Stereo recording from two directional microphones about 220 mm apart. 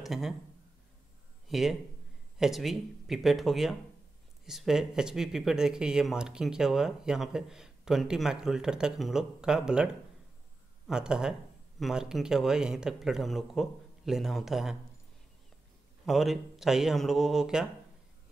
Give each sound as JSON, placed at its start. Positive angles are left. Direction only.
{"t": 0.0, "sound": "speech", "side_deg": 0}
{"t": 1.5, "sound": "speech", "side_deg": 0}
{"t": 10.9, "sound": "speech", "side_deg": -5}
{"t": 16.1, "sound": "speech", "side_deg": 0}